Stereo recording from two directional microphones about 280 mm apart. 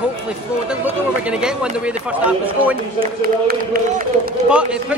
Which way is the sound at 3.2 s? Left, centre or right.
Right.